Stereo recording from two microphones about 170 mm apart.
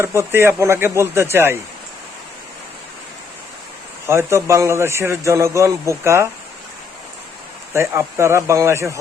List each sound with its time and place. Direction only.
0.0 s a man's voice: 15° right (ahead or behind)
4.0 s a man's voice: 15° right (ahead or behind)
7.7 s a man's voice: 15° right (ahead or behind)